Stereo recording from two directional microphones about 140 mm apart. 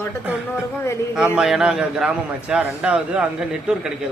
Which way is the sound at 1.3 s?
5° right (ahead or behind).